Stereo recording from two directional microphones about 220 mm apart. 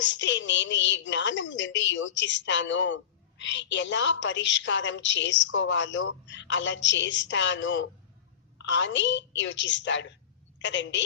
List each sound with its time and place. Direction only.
0.0 s a woman's voice: 55° left (ahead or behind)